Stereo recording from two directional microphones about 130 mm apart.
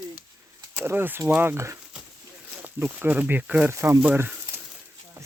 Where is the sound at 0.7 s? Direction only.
15° right (ahead or behind).